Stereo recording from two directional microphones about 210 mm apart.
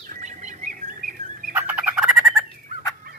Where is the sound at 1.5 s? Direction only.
10° right (ahead or behind).